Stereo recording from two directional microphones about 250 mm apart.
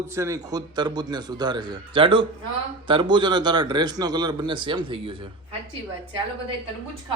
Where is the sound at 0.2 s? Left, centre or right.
Centre.